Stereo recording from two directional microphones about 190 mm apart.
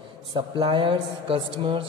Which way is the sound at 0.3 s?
25° right (ahead or behind).